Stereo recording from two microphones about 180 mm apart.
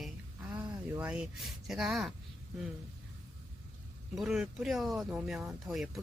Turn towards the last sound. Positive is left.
turn(degrees=0)  # may be behind; listen again after turning